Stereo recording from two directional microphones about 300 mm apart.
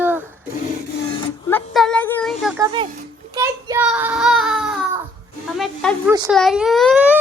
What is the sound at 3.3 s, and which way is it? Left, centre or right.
Child singing, centre.